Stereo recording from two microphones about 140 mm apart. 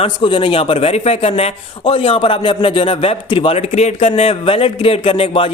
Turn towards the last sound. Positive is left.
turn(degrees=40)  # may be behind; listen again after turning